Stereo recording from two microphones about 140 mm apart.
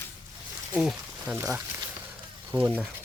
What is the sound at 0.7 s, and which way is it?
Speech, 5° right (ahead or behind).